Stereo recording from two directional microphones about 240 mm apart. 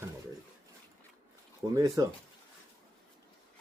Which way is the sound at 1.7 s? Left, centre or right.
Centre.